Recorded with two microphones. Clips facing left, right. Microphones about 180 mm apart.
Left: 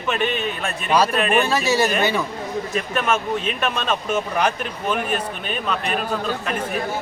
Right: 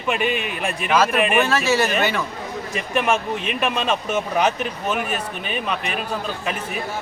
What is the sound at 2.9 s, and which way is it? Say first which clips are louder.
Speech: right 2 dB; 10° right (ahead or behind).